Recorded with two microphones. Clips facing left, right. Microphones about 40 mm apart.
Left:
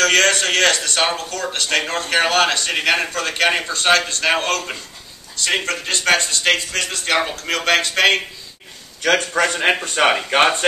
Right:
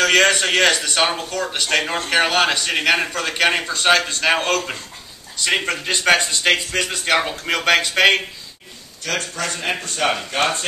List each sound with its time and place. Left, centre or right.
0.0 s a man's voice: centre
9.0 s a man's voice: left